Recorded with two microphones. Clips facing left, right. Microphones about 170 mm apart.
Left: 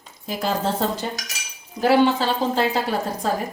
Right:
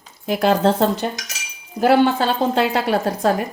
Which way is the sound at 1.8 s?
55° right (ahead or behind).